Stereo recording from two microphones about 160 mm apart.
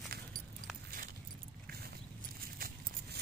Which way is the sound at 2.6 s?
65° right (ahead or behind).